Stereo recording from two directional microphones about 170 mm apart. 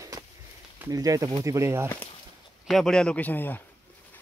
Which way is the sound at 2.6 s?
Centre (ahead or behind).